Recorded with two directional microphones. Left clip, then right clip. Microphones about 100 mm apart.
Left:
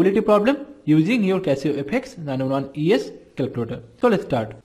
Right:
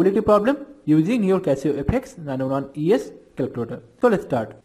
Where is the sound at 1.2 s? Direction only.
30° right (ahead or behind).